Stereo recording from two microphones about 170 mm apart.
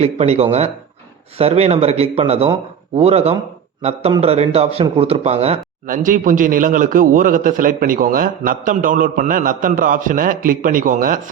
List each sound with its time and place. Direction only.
0.0 s a man's voice: 35° right (ahead or behind)
5.8 s a man's voice: 50° right (ahead or behind)